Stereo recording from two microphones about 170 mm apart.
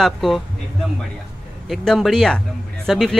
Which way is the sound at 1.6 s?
Centre (ahead or behind).